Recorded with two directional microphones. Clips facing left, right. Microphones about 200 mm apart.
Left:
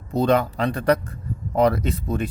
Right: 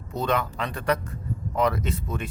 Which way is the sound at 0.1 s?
35° left (ahead or behind).